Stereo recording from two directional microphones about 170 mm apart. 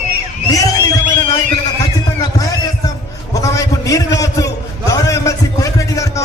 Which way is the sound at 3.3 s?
20° left (ahead or behind).